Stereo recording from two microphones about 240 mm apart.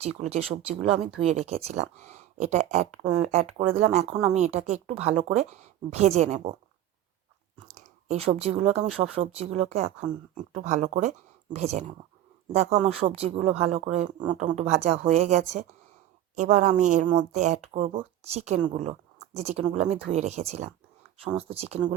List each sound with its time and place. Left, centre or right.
0.0 s speech: right
7.7 s speech: right